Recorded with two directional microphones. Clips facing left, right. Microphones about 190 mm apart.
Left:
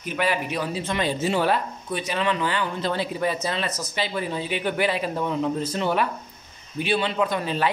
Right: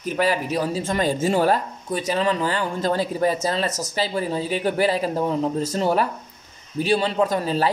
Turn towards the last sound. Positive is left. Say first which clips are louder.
# right 3 dB
turn(degrees=-40)  # may be behind; listen again after turning